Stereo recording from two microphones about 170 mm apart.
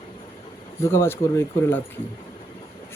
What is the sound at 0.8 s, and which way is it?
Speech, 15° left (ahead or behind).